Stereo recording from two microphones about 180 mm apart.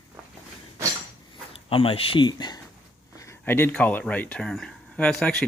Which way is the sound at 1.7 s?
30° left (ahead or behind).